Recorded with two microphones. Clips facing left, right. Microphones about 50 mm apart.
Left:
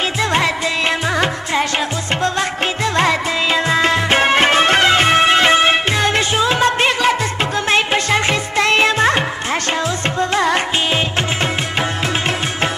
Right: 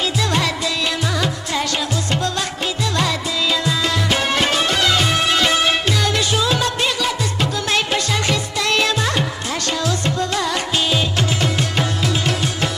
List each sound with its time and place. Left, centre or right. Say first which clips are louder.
0.2 s music: left 6 dB; left
2.8 s music: left 5 dB; left